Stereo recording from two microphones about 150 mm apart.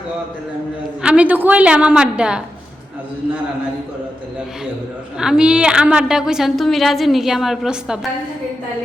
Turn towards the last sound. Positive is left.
turn(degrees=-5)  # may be behind; listen again after turning